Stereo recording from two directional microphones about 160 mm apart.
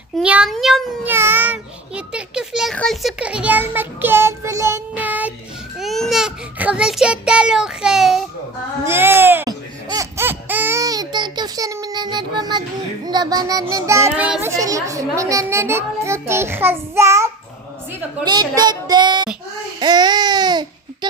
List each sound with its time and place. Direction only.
0.2 s a child's voice: 5° right (ahead or behind)
1.0 s a sound: 15° right (ahead or behind)
2.0 s a child's voice: 5° right (ahead or behind)
5.8 s a sound: centre (ahead or behind)
8.8 s a sound: 15° right (ahead or behind)
13.1 s child singing: 25° right (ahead or behind)
14.4 s a child's voice: 20° right (ahead or behind)
18.3 s child singing: 25° right (ahead or behind)
19.8 s babbling: 25° right (ahead or behind)